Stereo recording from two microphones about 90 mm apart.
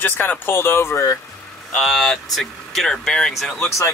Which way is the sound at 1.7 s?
5° left (ahead or behind).